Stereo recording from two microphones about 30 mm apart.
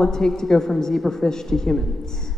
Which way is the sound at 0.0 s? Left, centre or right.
Centre.